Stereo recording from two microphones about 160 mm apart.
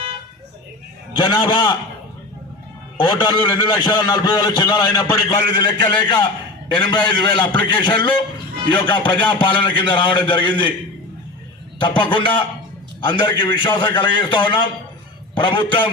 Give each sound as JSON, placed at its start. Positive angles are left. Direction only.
{"t": 1.2, "sound": "a man's voice", "side_deg": 25}
{"t": 3.0, "sound": "a man's voice", "side_deg": 25}
{"t": 11.8, "sound": "a man's voice", "side_deg": 30}